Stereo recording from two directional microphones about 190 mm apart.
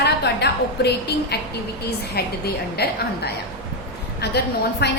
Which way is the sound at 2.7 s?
60° left (ahead or behind).